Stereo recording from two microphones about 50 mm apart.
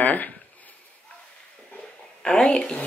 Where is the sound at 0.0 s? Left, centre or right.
Left.